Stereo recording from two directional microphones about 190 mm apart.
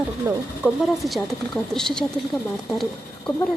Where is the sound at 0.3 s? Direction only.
15° right (ahead or behind).